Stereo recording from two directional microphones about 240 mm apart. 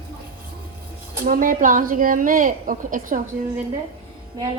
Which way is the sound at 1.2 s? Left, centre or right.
Right.